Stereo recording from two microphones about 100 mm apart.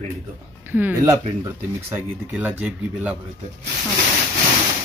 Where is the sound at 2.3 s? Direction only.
15° right (ahead or behind).